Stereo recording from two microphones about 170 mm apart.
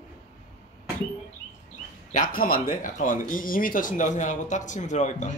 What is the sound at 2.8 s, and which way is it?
Speech, 50° left (ahead or behind).